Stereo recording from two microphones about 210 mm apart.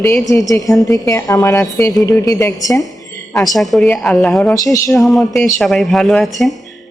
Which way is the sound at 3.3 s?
Centre (ahead or behind).